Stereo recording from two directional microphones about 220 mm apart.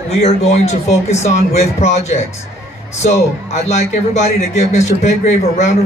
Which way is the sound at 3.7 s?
30° left (ahead or behind).